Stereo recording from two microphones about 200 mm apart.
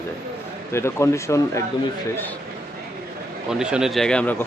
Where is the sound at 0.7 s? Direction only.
15° left (ahead or behind).